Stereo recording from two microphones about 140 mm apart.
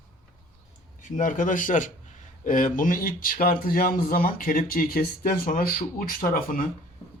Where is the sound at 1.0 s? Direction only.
65° left (ahead or behind); by 6.6 s 85° left.